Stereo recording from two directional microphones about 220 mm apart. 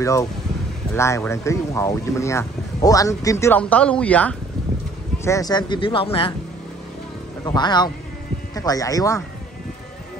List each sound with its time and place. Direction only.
0.0 s speech: 15° left (ahead or behind)
7.4 s speech: 20° left (ahead or behind)